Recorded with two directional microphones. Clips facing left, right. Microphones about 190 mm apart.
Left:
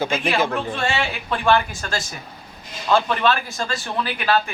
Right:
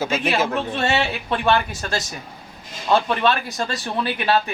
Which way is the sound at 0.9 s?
20° right (ahead or behind).